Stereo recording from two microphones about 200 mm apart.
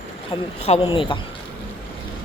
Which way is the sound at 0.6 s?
30° left (ahead or behind).